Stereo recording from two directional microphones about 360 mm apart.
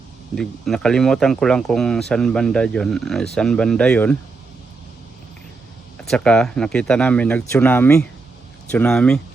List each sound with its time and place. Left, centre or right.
0.3 s speech: centre
6.1 s speech: centre